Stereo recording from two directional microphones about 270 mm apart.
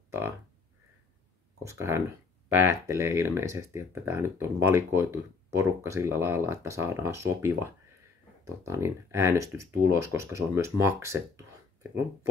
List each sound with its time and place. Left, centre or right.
1.6 s speech: centre